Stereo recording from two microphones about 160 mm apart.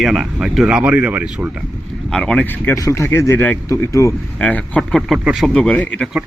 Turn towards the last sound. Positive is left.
turn(degrees=10)  # may be behind; listen again after turning